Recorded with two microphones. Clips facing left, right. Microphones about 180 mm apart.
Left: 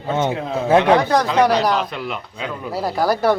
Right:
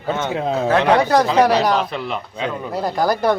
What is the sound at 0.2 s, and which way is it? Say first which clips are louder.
Speech: even; 25° left (ahead or behind).